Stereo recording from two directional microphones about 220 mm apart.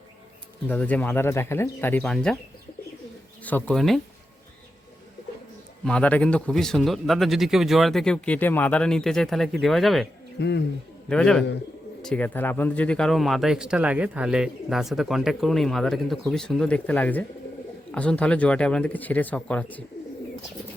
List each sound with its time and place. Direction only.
0.7 s speech: 5° left (ahead or behind)
3.4 s speech: 5° left (ahead or behind)
5.8 s speech: 5° left (ahead or behind)
10.4 s speech: 50° left (ahead or behind)
11.1 s speech: 5° left (ahead or behind)